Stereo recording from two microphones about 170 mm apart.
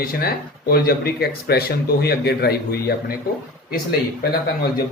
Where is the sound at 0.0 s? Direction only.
60° left (ahead or behind).